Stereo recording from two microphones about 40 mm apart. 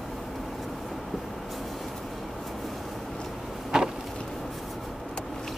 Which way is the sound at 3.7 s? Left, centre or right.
Centre.